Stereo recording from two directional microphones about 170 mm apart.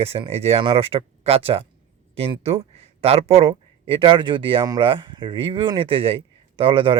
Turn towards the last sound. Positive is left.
turn(degrees=-30)  # may be behind; listen again after turning